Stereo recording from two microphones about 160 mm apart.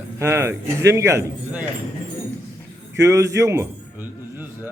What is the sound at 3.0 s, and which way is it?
Speech, 20° right (ahead or behind).